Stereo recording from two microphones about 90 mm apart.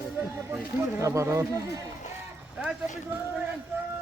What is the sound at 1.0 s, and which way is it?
Speech, 35° right (ahead or behind).